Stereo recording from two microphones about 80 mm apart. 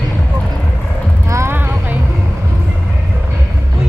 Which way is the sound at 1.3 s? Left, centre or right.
Right.